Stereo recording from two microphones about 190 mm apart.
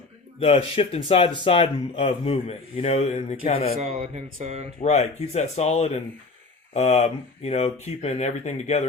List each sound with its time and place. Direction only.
0.3 s speech: 30° left (ahead or behind)
3.8 s speech: 40° right (ahead or behind)
4.8 s speech: 35° left (ahead or behind)